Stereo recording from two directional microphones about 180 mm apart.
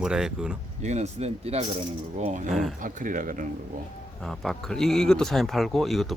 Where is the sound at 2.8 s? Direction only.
50° right (ahead or behind).